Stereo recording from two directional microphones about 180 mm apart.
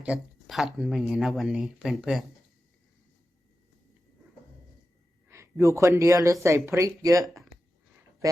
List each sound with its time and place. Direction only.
0.0 s speech: 5° right (ahead or behind)
5.3 s speech: 15° right (ahead or behind)